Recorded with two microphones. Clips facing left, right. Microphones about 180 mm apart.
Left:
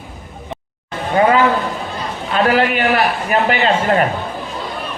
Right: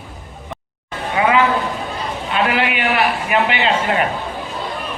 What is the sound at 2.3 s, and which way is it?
A man's voice, 40° left (ahead or behind).